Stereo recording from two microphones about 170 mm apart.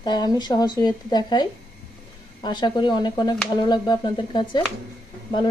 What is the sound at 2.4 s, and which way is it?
Speech, 25° left (ahead or behind).